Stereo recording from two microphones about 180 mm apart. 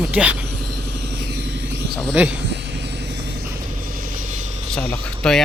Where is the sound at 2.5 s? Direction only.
70° right (ahead or behind).